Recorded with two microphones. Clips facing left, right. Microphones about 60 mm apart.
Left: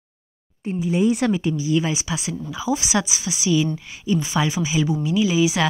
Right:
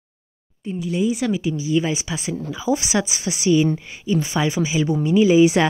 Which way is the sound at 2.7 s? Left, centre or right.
Right.